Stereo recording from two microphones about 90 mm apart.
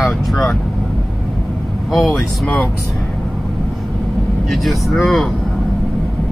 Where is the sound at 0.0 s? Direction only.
5° left (ahead or behind).